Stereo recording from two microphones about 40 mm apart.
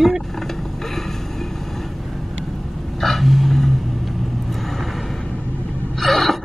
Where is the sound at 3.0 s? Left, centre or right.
Centre.